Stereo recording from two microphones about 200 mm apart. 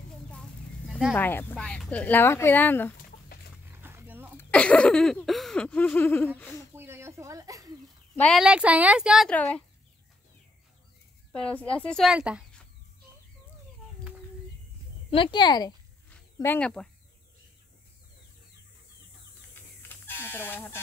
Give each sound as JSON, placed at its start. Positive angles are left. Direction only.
{"t": 1.1, "sound": "speech", "side_deg": 10}
{"t": 3.6, "sound": "a sound", "side_deg": -10}
{"t": 4.4, "sound": "a sound", "side_deg": 5}
{"t": 6.7, "sound": "a sound", "side_deg": -10}
{"t": 8.2, "sound": "a woman's voice", "side_deg": 0}
{"t": 11.3, "sound": "a woman's voice", "side_deg": 5}
{"t": 15.0, "sound": "speech", "side_deg": 25}
{"t": 16.3, "sound": "a woman's voice", "side_deg": 10}
{"t": 20.1, "sound": "speech", "side_deg": 10}